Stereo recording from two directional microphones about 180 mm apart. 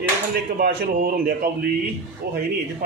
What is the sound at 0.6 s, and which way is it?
A man's voice, 55° right (ahead or behind).